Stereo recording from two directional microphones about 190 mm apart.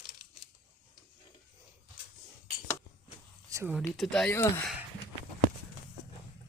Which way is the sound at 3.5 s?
15° right (ahead or behind).